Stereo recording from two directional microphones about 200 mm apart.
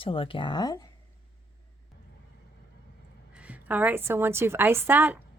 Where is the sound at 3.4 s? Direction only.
5° right (ahead or behind).